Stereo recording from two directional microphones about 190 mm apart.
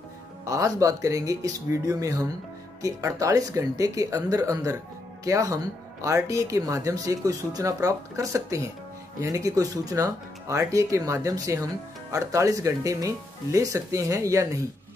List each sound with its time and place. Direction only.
0.5 s speech: 15° right (ahead or behind)